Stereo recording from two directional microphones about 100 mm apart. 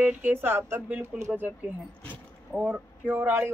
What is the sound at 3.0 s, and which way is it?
Speech, 20° right (ahead or behind).